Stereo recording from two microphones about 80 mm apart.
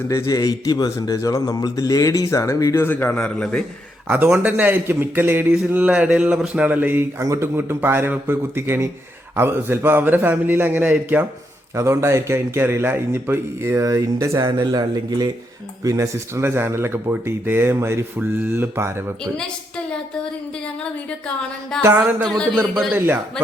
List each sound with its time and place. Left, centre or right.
0.1 s speech: left
2.8 s a man's voice: left
4.1 s a man's voice: centre
7.2 s a man's voice: right
11.7 s speech: right
14.3 s a man's voice: right
15.8 s speech: right
19.2 s a man's voice: centre
21.7 s a man's voice: centre
23.0 s a man's voice: right